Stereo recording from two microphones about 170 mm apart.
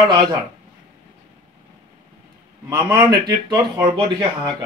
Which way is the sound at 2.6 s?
15° right (ahead or behind).